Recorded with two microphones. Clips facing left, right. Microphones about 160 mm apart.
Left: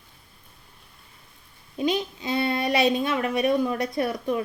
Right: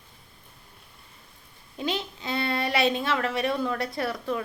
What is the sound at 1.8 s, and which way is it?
A child's voice, 20° left (ahead or behind).